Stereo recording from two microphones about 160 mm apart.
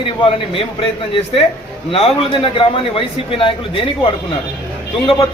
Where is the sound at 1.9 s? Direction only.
35° left (ahead or behind).